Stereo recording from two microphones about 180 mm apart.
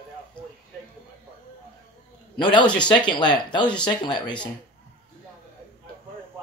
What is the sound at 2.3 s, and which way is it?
Speech, 25° left (ahead or behind).